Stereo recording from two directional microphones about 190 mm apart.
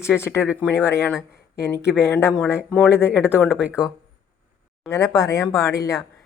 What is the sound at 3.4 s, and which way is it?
Speech, 5° right (ahead or behind).